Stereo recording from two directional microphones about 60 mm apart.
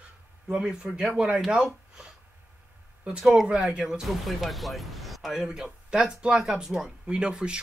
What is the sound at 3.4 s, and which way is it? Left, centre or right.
Speech, centre.